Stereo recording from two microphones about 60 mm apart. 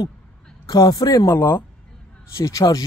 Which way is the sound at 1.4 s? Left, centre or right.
Left.